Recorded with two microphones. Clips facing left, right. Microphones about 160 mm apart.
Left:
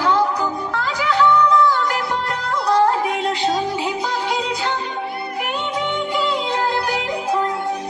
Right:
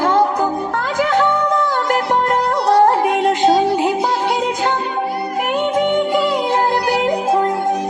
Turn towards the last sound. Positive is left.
turn(degrees=-50)  # may be behind; listen again after turning